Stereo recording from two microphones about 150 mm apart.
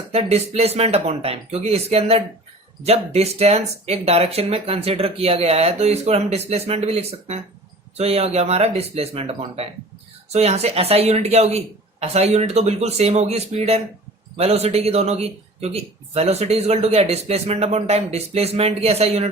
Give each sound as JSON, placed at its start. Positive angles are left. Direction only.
{"t": 0.1, "sound": "a man's voice", "side_deg": -45}